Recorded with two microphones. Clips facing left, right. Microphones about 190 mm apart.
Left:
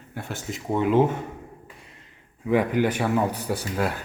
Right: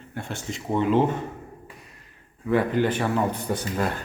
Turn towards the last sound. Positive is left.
turn(degrees=5)  # may be behind; listen again after turning